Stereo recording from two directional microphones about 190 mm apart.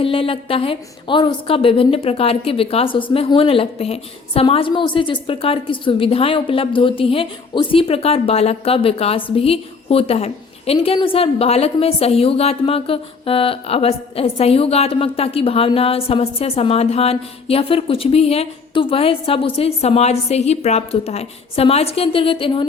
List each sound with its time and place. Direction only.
0.0 s a woman's voice: 30° left (ahead or behind)